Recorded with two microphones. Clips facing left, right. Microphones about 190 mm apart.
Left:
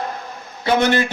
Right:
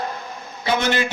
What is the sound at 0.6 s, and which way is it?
Speech, 50° left (ahead or behind).